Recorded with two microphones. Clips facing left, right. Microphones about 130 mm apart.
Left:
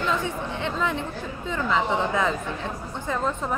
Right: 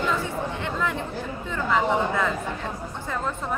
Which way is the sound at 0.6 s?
20° left (ahead or behind).